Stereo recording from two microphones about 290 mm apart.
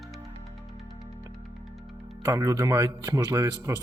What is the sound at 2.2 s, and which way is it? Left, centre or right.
Speech, centre.